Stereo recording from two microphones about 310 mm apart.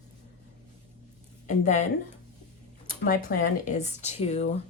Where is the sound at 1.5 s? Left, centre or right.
Left.